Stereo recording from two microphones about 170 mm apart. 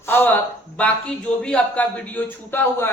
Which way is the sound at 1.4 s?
5° left (ahead or behind).